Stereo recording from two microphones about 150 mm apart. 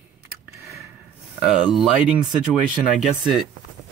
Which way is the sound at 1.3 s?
5° right (ahead or behind).